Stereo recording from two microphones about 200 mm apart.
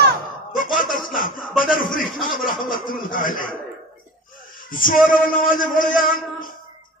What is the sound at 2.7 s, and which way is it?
Speech, 45° left (ahead or behind).